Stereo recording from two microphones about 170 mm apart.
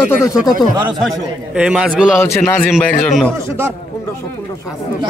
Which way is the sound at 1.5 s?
5° right (ahead or behind).